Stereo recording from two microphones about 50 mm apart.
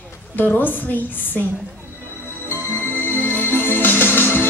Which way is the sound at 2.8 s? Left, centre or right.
Left.